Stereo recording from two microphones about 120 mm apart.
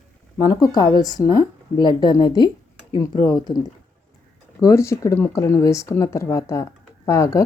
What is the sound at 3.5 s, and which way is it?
Speech, 45° left (ahead or behind).